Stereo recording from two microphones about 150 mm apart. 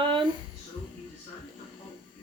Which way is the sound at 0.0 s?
35° right (ahead or behind).